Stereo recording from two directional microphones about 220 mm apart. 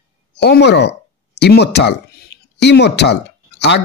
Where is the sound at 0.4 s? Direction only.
50° left (ahead or behind).